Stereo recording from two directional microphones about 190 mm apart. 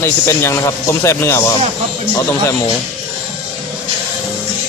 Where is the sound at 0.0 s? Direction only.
15° left (ahead or behind).